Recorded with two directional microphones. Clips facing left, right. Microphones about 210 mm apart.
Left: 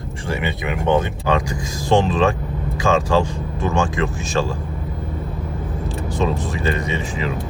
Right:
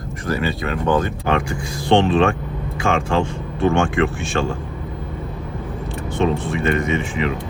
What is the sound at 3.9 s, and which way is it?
Speech, 35° left (ahead or behind).